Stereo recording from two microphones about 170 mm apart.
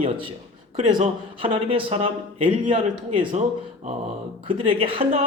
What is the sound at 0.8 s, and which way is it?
Speech, 30° right (ahead or behind).